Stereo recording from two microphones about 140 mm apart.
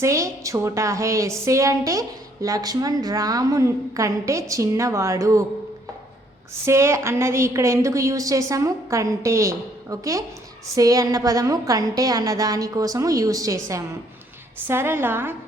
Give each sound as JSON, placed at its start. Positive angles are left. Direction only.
{"t": 0.0, "sound": "a woman's voice", "side_deg": -20}
{"t": 6.5, "sound": "a woman's voice", "side_deg": -20}
{"t": 14.7, "sound": "a woman's voice", "side_deg": -15}